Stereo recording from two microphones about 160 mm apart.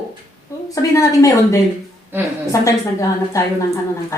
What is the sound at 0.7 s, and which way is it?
Speech, 20° left (ahead or behind).